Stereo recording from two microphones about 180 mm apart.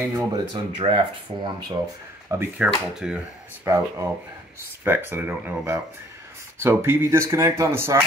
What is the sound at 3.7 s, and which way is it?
Speech, 15° right (ahead or behind).